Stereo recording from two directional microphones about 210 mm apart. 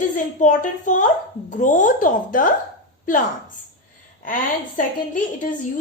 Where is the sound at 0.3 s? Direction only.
35° left (ahead or behind).